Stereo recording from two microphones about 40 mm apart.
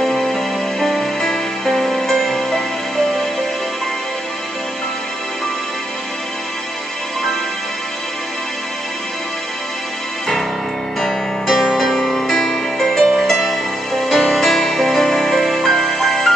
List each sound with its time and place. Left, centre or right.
0.0 s music: centre
11.0 s music: centre
13.5 s music: centre